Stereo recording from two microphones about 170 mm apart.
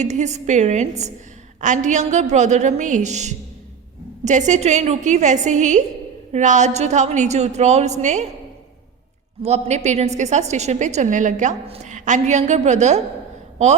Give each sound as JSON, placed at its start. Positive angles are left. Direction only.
{"t": 0.0, "sound": "a woman's voice", "side_deg": -45}
{"t": 9.4, "sound": "a woman's voice", "side_deg": -40}